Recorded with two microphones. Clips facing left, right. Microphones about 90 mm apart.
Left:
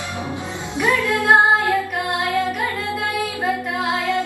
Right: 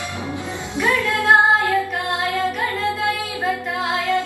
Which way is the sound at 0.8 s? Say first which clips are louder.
Left 1 dB; 15° left (ahead or behind).